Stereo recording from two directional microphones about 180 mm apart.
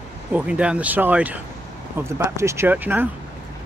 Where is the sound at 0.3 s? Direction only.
5° right (ahead or behind).